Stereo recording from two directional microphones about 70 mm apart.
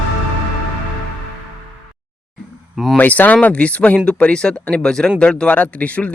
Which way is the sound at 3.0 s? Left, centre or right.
Left.